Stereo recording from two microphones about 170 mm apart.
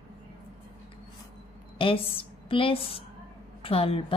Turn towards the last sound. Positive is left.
turn(degrees=30)  # may be behind; listen again after turning